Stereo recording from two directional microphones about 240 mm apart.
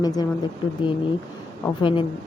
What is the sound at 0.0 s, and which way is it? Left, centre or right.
Speech, centre.